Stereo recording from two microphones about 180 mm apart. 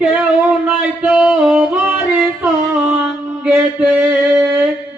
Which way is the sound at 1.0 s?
5° right (ahead or behind).